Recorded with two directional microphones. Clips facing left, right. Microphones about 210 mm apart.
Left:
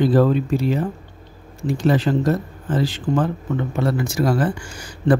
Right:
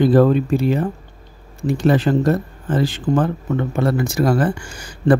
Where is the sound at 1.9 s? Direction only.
55° right (ahead or behind).